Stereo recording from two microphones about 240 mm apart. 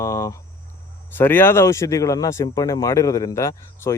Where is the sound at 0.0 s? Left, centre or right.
Centre.